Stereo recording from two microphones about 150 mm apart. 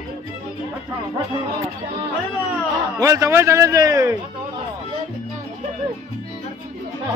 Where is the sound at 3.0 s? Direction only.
20° right (ahead or behind).